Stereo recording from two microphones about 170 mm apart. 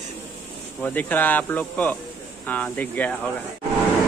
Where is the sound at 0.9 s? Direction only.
10° left (ahead or behind).